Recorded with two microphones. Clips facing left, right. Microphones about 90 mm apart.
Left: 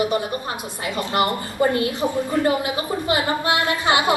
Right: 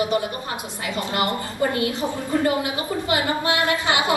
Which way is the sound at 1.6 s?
30° left (ahead or behind).